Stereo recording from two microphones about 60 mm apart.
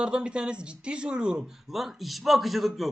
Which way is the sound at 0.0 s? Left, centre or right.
Centre.